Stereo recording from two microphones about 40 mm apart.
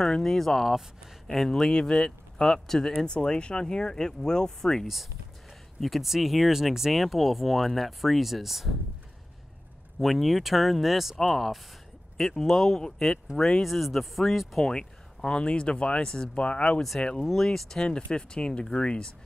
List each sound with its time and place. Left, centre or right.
0.0 s speech: centre
5.8 s speech: centre
9.9 s speech: centre
14.6 s speech: centre
16.4 s speech: left
17.4 s speech: centre
18.1 s speech: left